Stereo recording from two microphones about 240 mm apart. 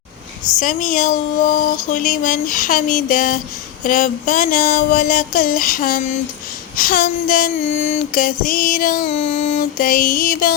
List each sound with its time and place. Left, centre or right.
0.6 s music: left